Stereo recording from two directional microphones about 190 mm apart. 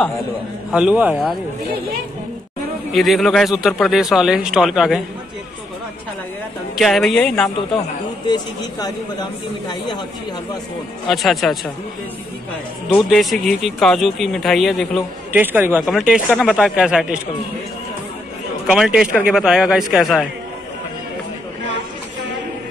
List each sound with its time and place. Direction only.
0.7 s speech: 5° right (ahead or behind)
2.9 s speech: centre (ahead or behind)
6.7 s speech: centre (ahead or behind)
8.3 s speech: 20° left (ahead or behind)
11.1 s speech: centre (ahead or behind)
13.1 s speech: centre (ahead or behind)
15.3 s speech: 10° right (ahead or behind)
18.7 s speech: 5° right (ahead or behind)